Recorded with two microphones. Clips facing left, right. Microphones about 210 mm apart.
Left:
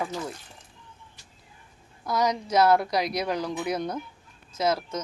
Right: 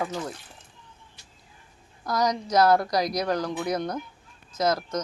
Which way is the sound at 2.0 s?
5° left (ahead or behind).